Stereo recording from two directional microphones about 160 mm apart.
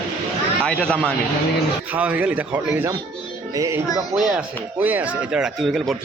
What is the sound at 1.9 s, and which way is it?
A man's voice, 10° right (ahead or behind).